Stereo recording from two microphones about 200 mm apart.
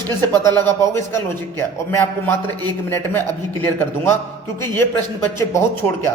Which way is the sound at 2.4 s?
20° right (ahead or behind).